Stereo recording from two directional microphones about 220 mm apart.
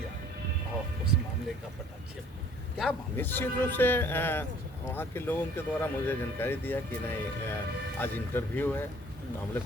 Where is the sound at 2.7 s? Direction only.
5° left (ahead or behind).